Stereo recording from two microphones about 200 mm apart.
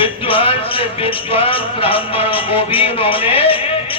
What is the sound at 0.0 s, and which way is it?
Music, 25° left (ahead or behind).